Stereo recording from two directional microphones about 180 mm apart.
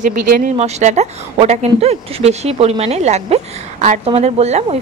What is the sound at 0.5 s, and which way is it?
Speech, 35° right (ahead or behind).